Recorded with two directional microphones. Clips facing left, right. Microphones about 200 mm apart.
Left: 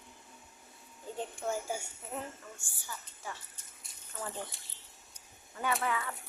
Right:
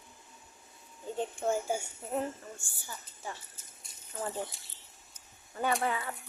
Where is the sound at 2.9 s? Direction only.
25° right (ahead or behind).